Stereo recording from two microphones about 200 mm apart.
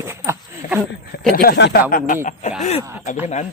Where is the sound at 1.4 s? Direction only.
55° left (ahead or behind).